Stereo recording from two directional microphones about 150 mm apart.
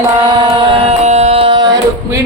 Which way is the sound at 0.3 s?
30° right (ahead or behind).